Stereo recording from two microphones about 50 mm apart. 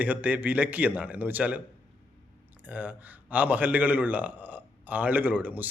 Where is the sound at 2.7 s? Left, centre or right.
Right.